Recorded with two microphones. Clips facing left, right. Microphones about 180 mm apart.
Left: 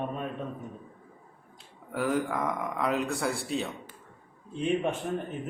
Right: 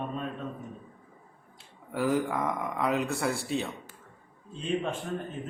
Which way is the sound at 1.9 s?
Centre (ahead or behind).